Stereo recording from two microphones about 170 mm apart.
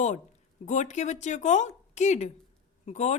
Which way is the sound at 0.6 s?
45° left (ahead or behind).